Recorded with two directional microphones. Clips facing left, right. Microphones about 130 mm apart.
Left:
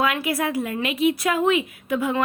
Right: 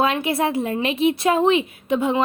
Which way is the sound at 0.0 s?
25° right (ahead or behind).